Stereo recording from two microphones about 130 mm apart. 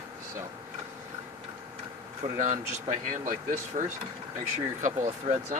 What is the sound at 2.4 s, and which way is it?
Speech, 70° right (ahead or behind).